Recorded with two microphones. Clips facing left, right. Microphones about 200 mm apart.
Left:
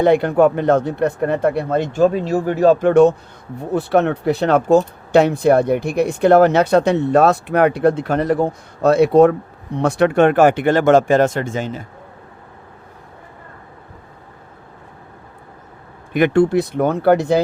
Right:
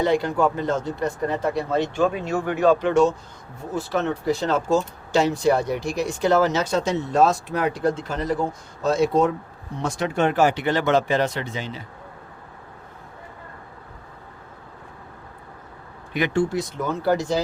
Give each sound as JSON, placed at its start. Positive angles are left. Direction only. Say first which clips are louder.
{"t": 0.0, "sound": "speech", "louder": "left 7 dB", "side_deg": 60}
{"t": 16.1, "sound": "speech", "louder": "left 8 dB", "side_deg": 60}